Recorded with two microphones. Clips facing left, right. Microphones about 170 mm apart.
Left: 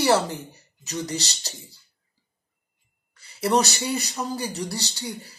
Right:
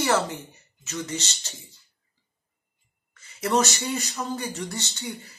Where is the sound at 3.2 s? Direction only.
35° left (ahead or behind).